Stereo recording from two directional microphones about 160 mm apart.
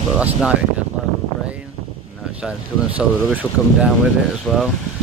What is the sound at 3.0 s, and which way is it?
Speech, centre (ahead or behind).